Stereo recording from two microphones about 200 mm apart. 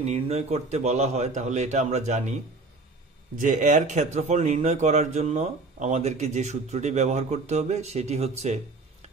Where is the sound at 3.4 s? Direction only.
40° right (ahead or behind).